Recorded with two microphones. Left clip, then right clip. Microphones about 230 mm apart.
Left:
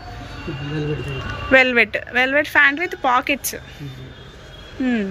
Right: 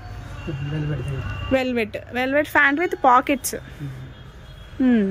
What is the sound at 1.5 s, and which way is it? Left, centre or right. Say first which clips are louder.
A woman's voice: left 8 dB; centre.